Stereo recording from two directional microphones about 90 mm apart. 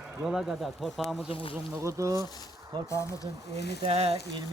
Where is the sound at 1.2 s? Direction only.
80° left.